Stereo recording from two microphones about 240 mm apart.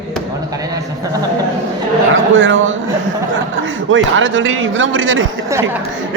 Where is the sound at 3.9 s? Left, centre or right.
Right.